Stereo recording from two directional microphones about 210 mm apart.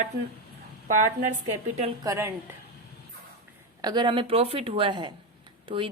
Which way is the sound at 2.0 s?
10° right (ahead or behind).